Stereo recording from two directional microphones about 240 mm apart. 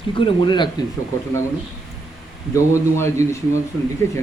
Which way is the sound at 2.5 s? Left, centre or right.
Centre.